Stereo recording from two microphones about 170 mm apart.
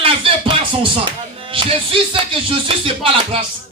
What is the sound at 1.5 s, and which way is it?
Music, 30° right (ahead or behind).